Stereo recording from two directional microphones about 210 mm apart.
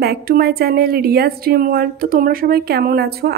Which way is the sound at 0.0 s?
45° right (ahead or behind).